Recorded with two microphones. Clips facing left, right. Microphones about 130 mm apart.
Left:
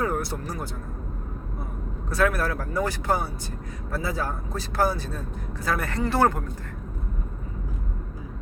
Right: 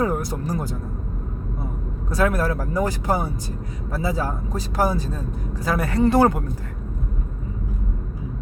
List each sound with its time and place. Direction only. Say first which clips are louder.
0.0 s music: right 4 dB; 15° right (ahead or behind)
2.0 s speech: right 3 dB; 15° right (ahead or behind)